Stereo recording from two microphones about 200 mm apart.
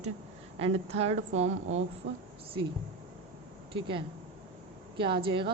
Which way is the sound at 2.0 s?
55° right (ahead or behind).